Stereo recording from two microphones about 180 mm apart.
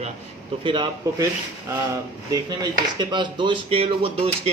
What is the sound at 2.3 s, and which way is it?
A man's voice, 20° right (ahead or behind).